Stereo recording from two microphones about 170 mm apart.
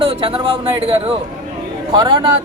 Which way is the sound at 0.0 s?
30° right (ahead or behind).